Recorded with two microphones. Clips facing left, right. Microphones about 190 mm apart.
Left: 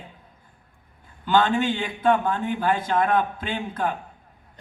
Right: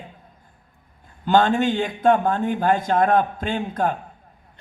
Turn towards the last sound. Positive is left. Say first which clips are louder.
# right 4 dB
turn(degrees=-45)  # may be behind; listen again after turning